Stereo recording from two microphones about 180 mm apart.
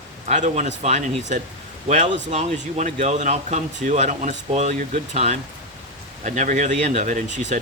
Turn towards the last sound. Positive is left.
turn(degrees=-40)  # may be behind; listen again after turning